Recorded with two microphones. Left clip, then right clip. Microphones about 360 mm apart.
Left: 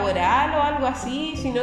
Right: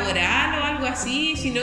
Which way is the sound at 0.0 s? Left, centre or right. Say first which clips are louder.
Left 1 dB; centre.